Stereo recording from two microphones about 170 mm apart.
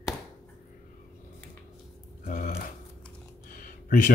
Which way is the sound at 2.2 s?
50° left (ahead or behind).